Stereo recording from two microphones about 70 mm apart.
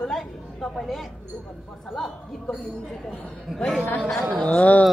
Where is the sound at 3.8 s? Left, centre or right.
Left.